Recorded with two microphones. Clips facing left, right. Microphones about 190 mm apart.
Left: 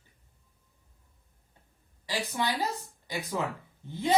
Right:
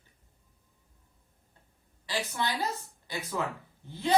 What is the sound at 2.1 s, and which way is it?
A woman's voice, 15° left (ahead or behind).